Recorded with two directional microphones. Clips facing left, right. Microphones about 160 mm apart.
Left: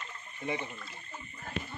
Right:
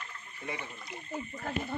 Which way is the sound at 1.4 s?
55° right (ahead or behind).